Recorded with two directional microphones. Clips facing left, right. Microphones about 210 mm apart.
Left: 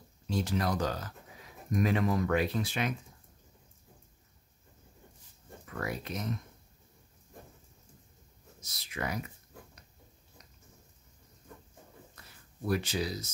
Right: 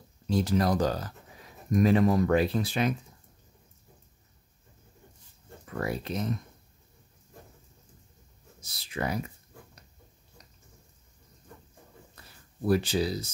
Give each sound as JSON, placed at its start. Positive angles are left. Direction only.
{"t": 0.3, "sound": "speech", "side_deg": -35}
{"t": 5.7, "sound": "speech", "side_deg": -30}
{"t": 8.5, "sound": "speech", "side_deg": -30}
{"t": 12.2, "sound": "a sound", "side_deg": -30}
{"t": 12.6, "sound": "speech", "side_deg": -30}